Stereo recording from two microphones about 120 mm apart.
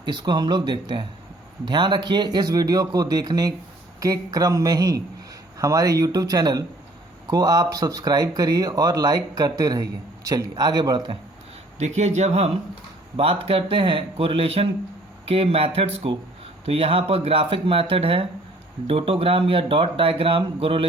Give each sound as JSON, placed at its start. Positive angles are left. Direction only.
{"t": 0.0, "sound": "speech", "side_deg": -40}
{"t": 11.8, "sound": "speech", "side_deg": -75}
{"t": 13.1, "sound": "speech", "side_deg": -55}